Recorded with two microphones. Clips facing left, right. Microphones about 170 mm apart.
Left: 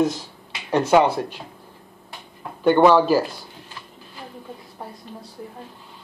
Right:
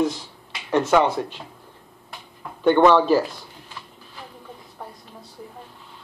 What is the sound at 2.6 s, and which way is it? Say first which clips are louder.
Speech: left 1 dB; 5° left (ahead or behind).